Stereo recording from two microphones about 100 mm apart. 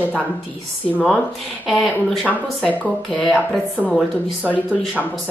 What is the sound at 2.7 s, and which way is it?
Speech, 15° left (ahead or behind).